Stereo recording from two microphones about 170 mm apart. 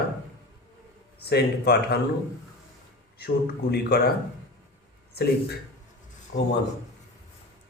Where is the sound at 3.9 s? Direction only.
70° left (ahead or behind).